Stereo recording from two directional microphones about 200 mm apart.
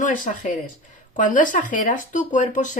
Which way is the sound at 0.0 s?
40° left (ahead or behind).